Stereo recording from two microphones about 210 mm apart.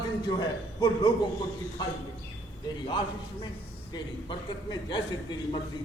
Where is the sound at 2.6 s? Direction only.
20° left (ahead or behind).